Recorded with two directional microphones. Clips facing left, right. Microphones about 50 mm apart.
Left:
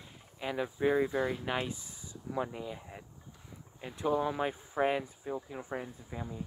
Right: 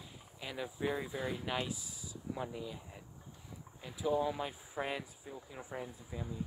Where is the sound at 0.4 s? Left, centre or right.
Centre.